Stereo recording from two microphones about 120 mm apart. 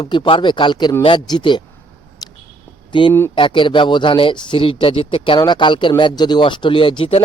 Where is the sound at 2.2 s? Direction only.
30° left (ahead or behind).